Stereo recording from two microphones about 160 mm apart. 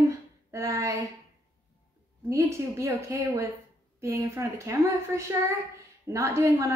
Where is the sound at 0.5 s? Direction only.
20° right (ahead or behind).